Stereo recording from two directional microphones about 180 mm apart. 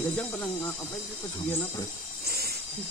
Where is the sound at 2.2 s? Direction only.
60° right (ahead or behind).